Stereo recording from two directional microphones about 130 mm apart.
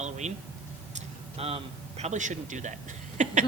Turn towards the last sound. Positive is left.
turn(degrees=-70)  # may be behind; listen again after turning